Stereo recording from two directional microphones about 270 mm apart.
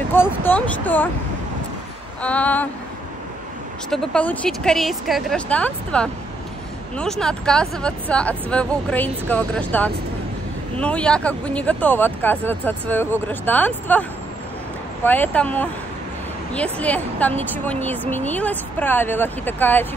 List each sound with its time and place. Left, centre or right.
0.4 s a woman's voice: centre
2.2 s speech: centre
3.9 s a woman's voice: centre
15.0 s a woman's voice: centre